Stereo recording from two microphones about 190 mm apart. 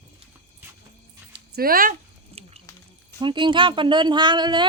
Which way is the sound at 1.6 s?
50° right (ahead or behind).